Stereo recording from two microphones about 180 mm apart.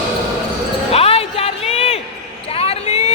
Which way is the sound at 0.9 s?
35° left (ahead or behind).